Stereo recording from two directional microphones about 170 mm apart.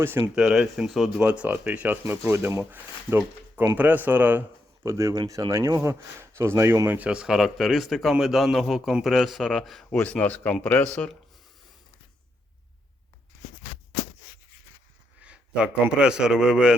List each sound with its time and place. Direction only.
0.0 s speech: 15° right (ahead or behind); by 10.8 s 10° left (ahead or behind)
15.2 s a man's voice: 5° right (ahead or behind)